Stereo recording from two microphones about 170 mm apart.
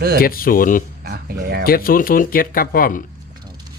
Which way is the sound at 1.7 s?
60° left (ahead or behind).